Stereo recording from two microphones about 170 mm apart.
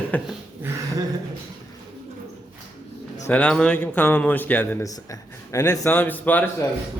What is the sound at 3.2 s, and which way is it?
A man's voice, 5° left (ahead or behind).